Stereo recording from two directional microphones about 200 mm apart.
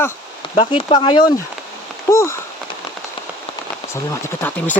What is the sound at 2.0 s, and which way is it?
Rain on surface, 15° left (ahead or behind).